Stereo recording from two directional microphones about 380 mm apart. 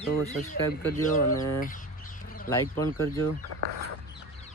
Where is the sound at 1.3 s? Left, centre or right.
Centre.